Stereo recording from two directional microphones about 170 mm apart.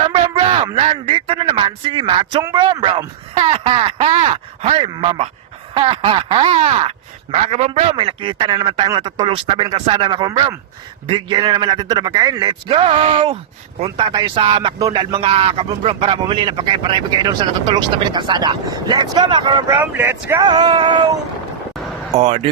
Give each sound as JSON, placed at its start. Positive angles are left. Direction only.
{"t": 0.0, "sound": "a sound", "side_deg": -30}
{"t": 2.4, "sound": "a man's voice", "side_deg": -20}
{"t": 2.7, "sound": "a man's voice", "side_deg": -30}
{"t": 19.7, "sound": "speech", "side_deg": -10}
{"t": 20.4, "sound": "a man's voice", "side_deg": -25}
{"t": 22.2, "sound": "speech", "side_deg": -40}